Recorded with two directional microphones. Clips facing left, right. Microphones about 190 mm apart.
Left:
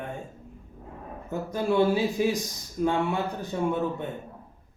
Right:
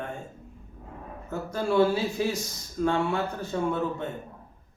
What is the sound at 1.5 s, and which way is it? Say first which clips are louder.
Speech: even; 15° left (ahead or behind).